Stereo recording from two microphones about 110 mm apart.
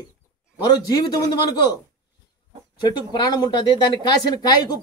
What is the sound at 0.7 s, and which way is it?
Speech, 35° left (ahead or behind).